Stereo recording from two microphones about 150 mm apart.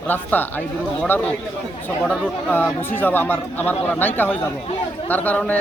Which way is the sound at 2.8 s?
15° left (ahead or behind).